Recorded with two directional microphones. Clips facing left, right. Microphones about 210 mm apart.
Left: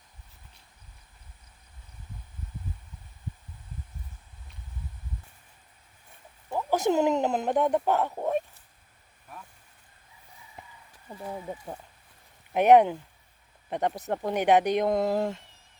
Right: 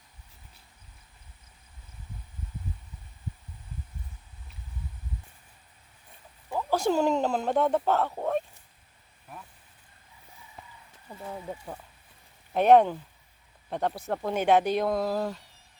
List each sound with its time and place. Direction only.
6.5 s speech: 20° left (ahead or behind)
11.1 s speech: 10° left (ahead or behind)